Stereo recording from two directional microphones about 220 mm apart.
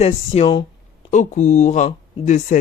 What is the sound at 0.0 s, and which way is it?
Speech, 25° left (ahead or behind).